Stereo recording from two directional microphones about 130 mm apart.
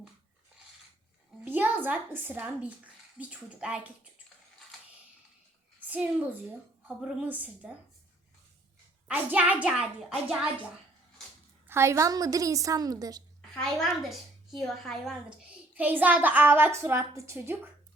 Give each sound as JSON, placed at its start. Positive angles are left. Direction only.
{"t": 1.5, "sound": "a woman's voice", "side_deg": -15}
{"t": 5.9, "sound": "a woman's voice", "side_deg": -15}
{"t": 9.0, "sound": "a woman's voice", "side_deg": -10}
{"t": 11.7, "sound": "a woman's voice", "side_deg": -20}
{"t": 13.6, "sound": "a woman's voice", "side_deg": 0}